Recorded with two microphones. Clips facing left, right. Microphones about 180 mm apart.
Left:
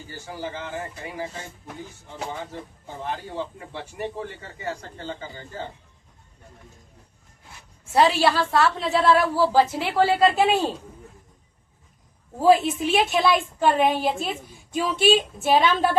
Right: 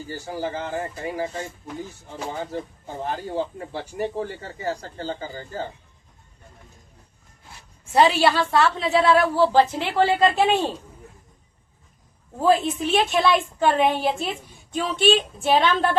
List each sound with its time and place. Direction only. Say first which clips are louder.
0.1 s a man's voice: right 4 dB; 35° right (ahead or behind)
2.3 s a man's voice: right 4 dB; 35° right (ahead or behind)
7.9 s a woman's voice: right 1 dB; centre (ahead or behind)
12.4 s a woman's voice: left 2 dB; 5° left (ahead or behind)